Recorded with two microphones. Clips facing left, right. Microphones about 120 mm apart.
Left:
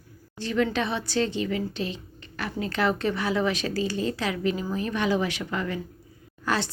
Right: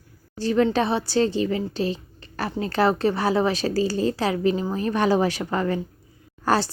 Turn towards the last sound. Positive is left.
turn(degrees=-35)  # may be behind; listen again after turning